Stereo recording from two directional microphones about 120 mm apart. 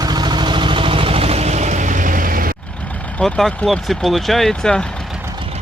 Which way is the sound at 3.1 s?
5° left (ahead or behind).